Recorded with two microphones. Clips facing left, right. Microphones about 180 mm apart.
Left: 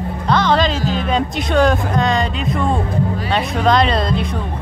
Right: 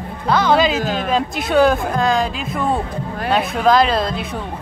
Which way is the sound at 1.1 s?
5° right (ahead or behind).